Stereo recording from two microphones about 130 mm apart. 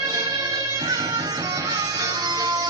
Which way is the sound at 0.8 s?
30° right (ahead or behind).